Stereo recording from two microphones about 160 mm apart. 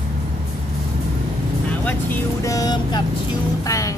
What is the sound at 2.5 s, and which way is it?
Speech, 25° left (ahead or behind).